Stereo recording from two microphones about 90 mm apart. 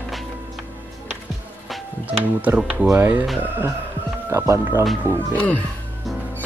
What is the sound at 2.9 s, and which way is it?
Speech, 20° right (ahead or behind).